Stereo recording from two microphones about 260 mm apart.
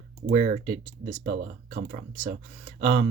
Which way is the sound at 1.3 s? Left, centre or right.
Right.